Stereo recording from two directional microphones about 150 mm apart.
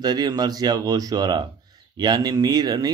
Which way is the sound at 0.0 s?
25° right (ahead or behind).